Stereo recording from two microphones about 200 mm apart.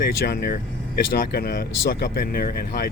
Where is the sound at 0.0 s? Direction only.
50° left (ahead or behind).